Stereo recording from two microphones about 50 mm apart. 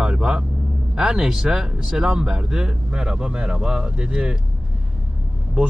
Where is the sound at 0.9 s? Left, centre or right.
Centre.